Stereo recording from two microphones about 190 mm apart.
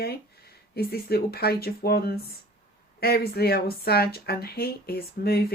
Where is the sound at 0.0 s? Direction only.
55° left (ahead or behind).